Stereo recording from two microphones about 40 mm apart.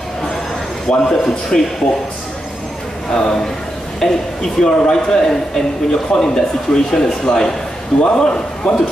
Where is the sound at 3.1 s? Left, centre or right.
Centre.